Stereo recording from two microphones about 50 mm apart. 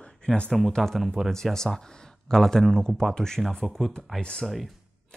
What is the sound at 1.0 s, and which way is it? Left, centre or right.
Speech, centre.